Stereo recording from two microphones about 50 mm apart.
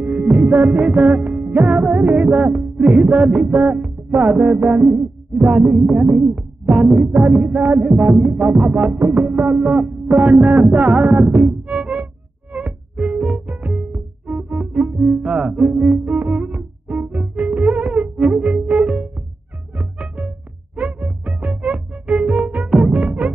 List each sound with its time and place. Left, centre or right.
0.0 s music: right
1.9 s music: right
2.2 s music: right
5.7 s music: centre
10.1 s music: right
13.5 s music: right
22.7 s music: centre
22.9 s music: right